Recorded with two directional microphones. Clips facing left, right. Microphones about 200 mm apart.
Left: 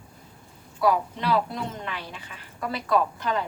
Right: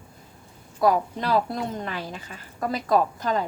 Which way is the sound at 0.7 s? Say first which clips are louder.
Right 2 dB; 45° right (ahead or behind).